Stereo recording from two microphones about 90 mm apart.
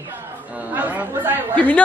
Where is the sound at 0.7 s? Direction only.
20° right (ahead or behind).